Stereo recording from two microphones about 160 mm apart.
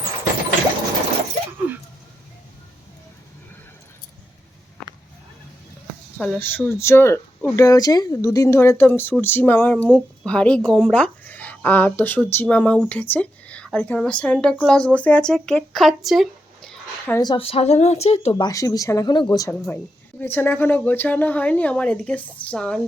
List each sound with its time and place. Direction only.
4.8 s a sound: 5° left (ahead or behind)
6.1 s speech: 5° left (ahead or behind)
17.2 s speech: 30° left (ahead or behind)
18.4 s a woman's voice: 20° left (ahead or behind); by 22.8 s 5° left (ahead or behind)